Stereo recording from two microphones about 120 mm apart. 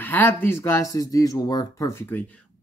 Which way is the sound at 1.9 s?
20° left (ahead or behind).